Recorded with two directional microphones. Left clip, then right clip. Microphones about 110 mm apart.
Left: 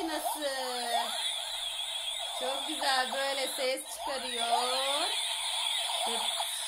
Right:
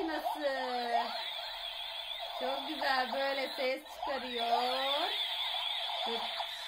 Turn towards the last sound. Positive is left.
turn(degrees=0)  # may be behind; listen again after turning